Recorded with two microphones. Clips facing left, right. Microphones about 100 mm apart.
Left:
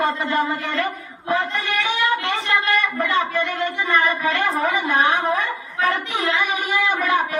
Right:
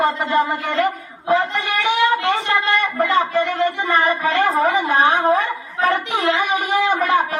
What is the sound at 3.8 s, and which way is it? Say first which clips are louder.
A woman's voice: right 2 dB; 25° right (ahead or behind).